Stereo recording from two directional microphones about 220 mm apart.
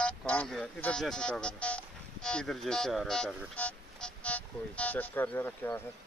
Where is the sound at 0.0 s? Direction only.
5° left (ahead or behind).